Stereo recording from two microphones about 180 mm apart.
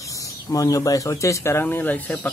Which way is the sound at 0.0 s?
20° left (ahead or behind).